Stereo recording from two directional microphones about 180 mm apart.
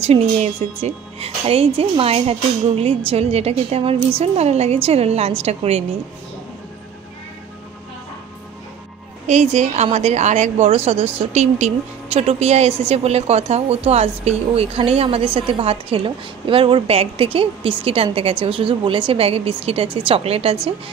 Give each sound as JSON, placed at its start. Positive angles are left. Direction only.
{"t": 0.0, "sound": "a woman's voice", "side_deg": -35}
{"t": 9.3, "sound": "a woman's voice", "side_deg": -40}